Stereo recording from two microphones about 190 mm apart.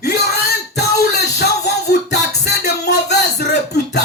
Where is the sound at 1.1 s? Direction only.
60° left (ahead or behind).